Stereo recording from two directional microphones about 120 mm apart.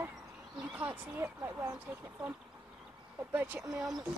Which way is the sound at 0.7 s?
15° right (ahead or behind).